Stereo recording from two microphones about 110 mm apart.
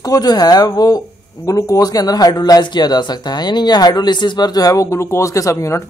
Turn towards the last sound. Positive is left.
turn(degrees=25)  # may be behind; listen again after turning